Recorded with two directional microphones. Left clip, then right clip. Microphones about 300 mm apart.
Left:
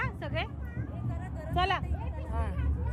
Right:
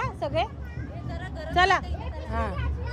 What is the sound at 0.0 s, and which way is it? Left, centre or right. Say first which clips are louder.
Children playing: right 7 dB; centre.